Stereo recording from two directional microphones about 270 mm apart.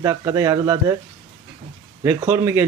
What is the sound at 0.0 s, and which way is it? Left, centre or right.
Speech, centre.